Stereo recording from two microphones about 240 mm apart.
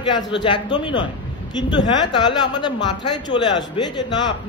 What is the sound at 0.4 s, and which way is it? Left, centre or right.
A woman's voice, centre.